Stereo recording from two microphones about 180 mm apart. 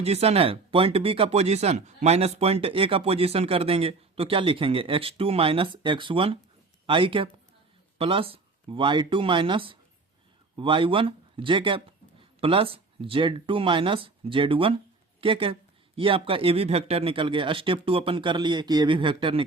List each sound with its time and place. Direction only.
0.0 s speech: 35° right (ahead or behind)